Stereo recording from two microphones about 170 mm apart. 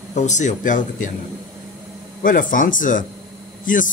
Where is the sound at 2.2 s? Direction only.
50° left (ahead or behind).